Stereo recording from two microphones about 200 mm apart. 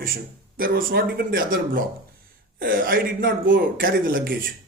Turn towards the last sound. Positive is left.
turn(degrees=-45)  # may be behind; listen again after turning